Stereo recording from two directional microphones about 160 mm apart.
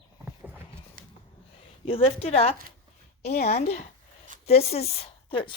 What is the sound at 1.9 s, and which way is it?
A woman's voice, 35° left (ahead or behind).